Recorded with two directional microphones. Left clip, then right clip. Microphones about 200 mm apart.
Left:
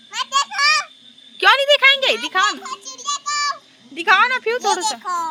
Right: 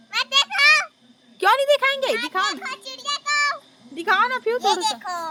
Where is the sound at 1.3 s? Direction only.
10° right (ahead or behind).